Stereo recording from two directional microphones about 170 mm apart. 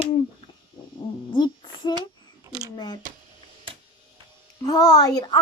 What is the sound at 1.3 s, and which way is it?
Child singing, 25° left (ahead or behind).